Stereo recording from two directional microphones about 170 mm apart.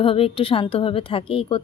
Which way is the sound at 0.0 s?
35° left (ahead or behind).